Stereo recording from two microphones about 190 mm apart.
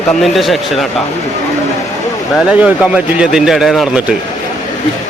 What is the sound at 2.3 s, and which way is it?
A man's voice, 5° right (ahead or behind).